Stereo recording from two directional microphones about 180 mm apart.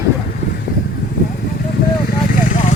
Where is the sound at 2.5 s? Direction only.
45° left (ahead or behind).